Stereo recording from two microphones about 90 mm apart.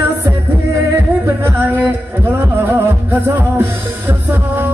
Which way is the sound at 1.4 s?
20° right (ahead or behind).